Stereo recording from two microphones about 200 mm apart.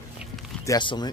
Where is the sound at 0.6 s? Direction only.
20° left (ahead or behind).